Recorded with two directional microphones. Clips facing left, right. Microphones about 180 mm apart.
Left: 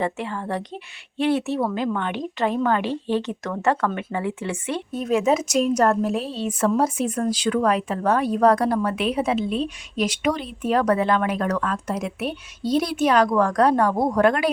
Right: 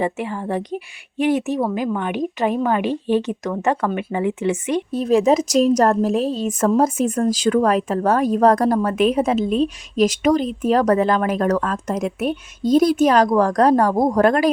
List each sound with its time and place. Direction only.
0.0 s speech: 15° right (ahead or behind)
4.9 s a woman's voice: 35° right (ahead or behind)